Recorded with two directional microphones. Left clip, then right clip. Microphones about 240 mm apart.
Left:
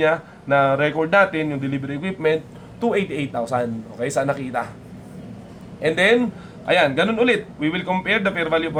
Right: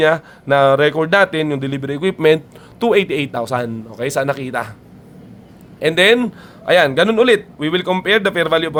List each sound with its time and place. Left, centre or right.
0.0 s a man's voice: right
5.8 s a man's voice: right